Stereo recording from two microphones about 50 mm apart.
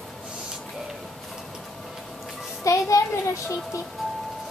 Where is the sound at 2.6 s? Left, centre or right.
Left.